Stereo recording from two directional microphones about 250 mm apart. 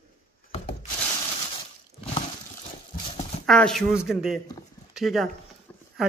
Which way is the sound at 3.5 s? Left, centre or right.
Centre.